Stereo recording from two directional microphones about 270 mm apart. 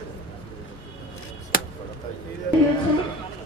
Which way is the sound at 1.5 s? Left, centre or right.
Left.